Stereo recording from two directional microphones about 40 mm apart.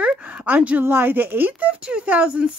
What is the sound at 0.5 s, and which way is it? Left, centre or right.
Speech, right.